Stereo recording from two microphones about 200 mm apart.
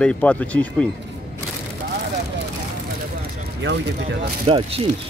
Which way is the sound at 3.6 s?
60° right (ahead or behind).